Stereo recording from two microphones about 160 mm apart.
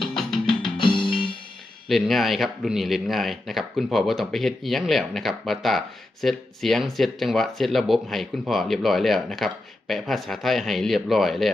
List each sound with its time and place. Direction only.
0.0 s music: centre (ahead or behind)
0.8 s music: 30° left (ahead or behind)
1.9 s speech: centre (ahead or behind)